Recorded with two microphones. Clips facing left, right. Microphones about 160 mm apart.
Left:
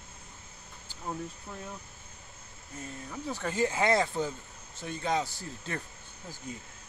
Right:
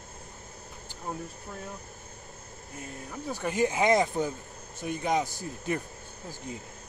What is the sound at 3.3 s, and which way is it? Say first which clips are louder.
Speech: right 3 dB; 15° right (ahead or behind).